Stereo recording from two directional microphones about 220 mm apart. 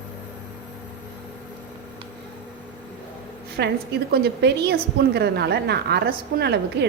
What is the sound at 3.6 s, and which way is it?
A woman's voice, 50° right (ahead or behind).